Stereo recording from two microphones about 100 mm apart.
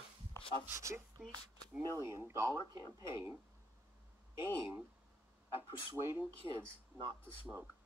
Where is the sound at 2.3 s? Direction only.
25° right (ahead or behind).